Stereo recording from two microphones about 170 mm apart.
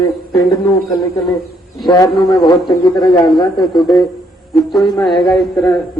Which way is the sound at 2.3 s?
25° left (ahead or behind).